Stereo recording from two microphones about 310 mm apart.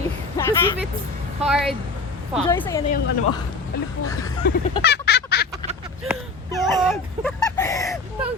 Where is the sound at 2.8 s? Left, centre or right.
Left.